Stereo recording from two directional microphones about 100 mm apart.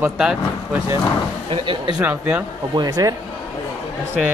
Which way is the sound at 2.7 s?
40° right (ahead or behind).